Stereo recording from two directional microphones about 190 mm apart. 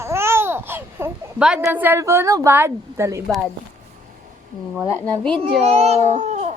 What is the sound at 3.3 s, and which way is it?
Speech, centre (ahead or behind).